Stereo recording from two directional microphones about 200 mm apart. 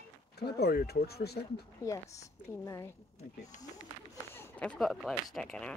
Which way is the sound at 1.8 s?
15° left (ahead or behind).